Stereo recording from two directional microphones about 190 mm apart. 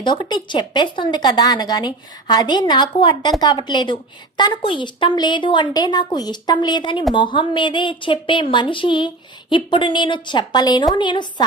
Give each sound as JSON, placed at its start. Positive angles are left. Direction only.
{"t": 0.0, "sound": "speech", "side_deg": 25}